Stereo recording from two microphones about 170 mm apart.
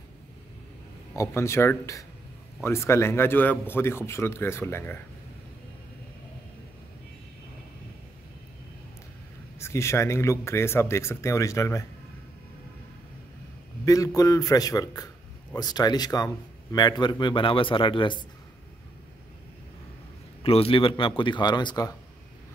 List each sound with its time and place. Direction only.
1.1 s a man's voice: 15° left (ahead or behind)
9.6 s a man's voice: 15° left (ahead or behind)
13.8 s a man's voice: 20° left (ahead or behind)
20.4 s a man's voice: 35° left (ahead or behind)